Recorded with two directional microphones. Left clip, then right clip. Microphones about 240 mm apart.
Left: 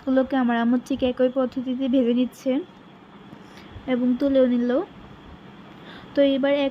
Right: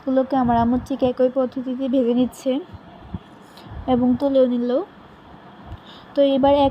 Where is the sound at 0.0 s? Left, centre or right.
Left.